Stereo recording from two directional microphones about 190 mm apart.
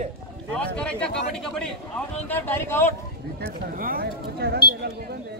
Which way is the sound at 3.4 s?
50° right (ahead or behind).